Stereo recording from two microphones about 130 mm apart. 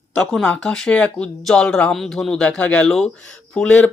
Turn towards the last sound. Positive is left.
turn(degrees=5)  # may be behind; listen again after turning